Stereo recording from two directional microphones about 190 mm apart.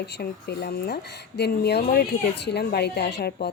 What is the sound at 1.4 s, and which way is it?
A woman's voice, 60° left (ahead or behind).